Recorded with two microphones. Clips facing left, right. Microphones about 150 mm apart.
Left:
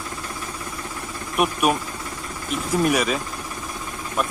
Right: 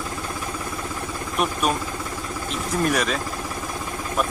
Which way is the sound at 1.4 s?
10° left (ahead or behind).